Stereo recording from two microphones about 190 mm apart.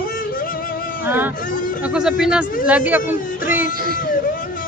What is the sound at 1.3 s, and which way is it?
Speech, 45° left (ahead or behind).